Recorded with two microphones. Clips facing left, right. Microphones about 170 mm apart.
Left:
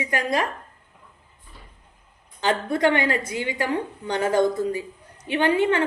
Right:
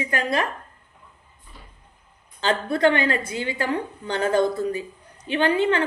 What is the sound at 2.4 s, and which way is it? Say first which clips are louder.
Speech: right 1 dB; 20° left (ahead or behind).